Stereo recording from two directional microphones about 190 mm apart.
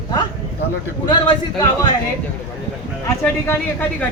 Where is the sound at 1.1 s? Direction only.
25° left (ahead or behind).